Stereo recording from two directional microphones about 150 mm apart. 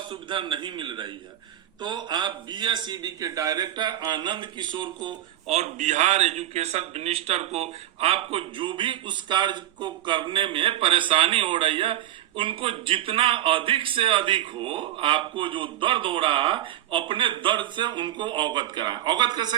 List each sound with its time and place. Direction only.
0.1 s a man's voice: 35° right (ahead or behind)
5.5 s a man's voice: 50° right (ahead or behind); by 19.5 s 30° right (ahead or behind)